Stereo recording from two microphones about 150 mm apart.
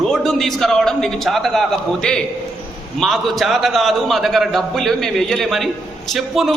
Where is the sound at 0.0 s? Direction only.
Centre (ahead or behind).